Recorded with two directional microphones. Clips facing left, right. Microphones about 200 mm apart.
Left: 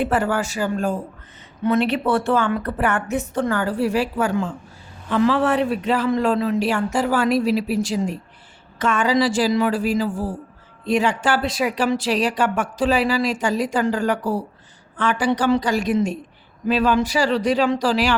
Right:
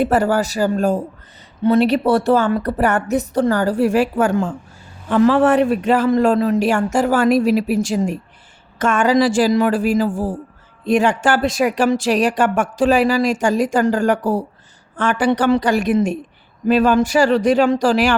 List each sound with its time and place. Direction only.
0.0 s a woman's voice: 40° right (ahead or behind)